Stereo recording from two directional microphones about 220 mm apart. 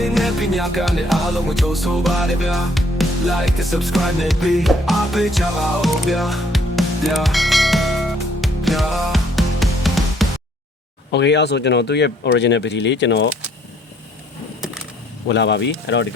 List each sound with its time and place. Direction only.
0.0 s music: centre (ahead or behind)
11.1 s speech: 50° left (ahead or behind)
15.3 s speech: 50° left (ahead or behind)